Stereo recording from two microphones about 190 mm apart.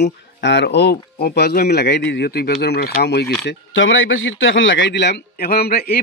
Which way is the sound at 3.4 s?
85° left.